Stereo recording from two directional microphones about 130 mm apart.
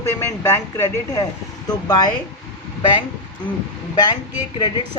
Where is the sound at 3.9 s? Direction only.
35° left (ahead or behind).